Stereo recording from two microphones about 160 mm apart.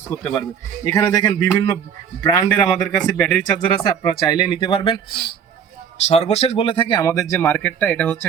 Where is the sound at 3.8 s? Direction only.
30° left (ahead or behind).